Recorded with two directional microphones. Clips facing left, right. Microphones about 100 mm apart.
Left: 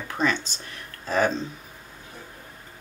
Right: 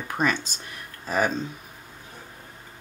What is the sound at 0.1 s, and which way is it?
Speech, 15° right (ahead or behind).